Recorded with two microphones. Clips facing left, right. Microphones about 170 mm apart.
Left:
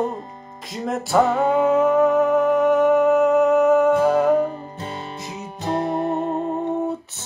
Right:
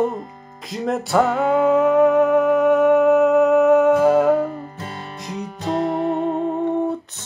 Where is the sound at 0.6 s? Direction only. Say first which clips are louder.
Right 3 dB; centre (ahead or behind).